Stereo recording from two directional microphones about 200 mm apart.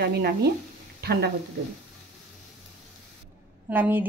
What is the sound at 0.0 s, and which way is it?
Speech, 50° right (ahead or behind).